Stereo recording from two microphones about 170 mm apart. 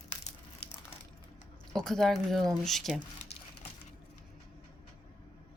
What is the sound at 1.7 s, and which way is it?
Speech, centre (ahead or behind).